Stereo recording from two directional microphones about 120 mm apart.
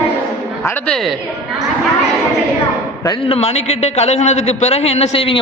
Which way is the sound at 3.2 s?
55° left (ahead or behind).